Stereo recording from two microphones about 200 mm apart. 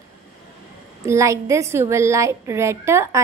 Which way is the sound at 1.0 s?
15° right (ahead or behind).